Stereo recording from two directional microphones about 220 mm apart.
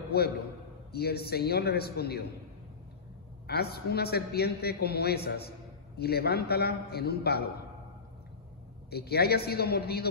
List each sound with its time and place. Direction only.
0.1 s a man's voice: 45° left (ahead or behind)
3.4 s a man's voice: 45° left (ahead or behind)
8.9 s a man's voice: 45° left (ahead or behind)